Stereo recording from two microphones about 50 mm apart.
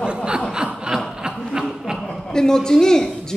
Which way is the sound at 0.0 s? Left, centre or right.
Centre.